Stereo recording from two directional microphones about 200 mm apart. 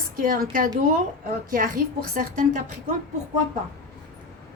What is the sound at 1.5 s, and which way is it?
Speech, 45° right (ahead or behind).